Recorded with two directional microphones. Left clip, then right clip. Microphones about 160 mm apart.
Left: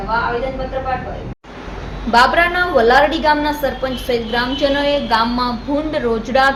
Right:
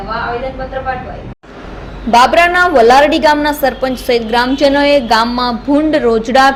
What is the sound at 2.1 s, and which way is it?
A woman's voice, 50° right (ahead or behind).